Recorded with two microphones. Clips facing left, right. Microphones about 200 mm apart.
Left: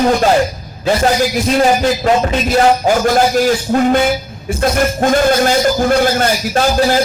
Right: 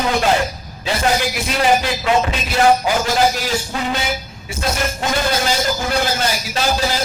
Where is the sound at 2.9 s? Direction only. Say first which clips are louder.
Left 5 dB; 50° left (ahead or behind).